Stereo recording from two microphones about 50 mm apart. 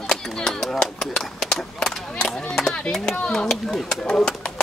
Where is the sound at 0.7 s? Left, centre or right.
Centre.